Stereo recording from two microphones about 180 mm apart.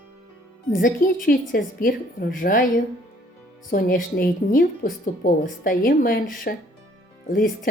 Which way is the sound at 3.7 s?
55° left (ahead or behind).